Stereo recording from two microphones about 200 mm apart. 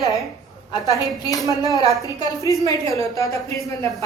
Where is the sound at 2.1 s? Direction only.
15° left (ahead or behind).